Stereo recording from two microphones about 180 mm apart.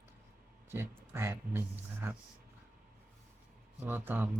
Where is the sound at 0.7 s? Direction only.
15° right (ahead or behind).